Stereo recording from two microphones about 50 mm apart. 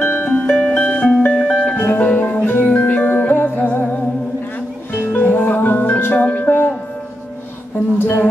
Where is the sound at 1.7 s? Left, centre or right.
Left.